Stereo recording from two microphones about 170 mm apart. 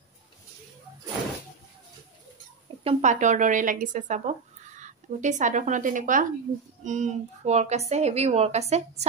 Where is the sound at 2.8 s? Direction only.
40° right (ahead or behind).